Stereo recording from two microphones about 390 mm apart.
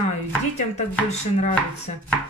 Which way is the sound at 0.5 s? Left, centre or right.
Centre.